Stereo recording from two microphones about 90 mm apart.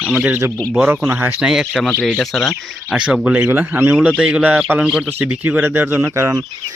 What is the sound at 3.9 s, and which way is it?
Speech, 10° right (ahead or behind).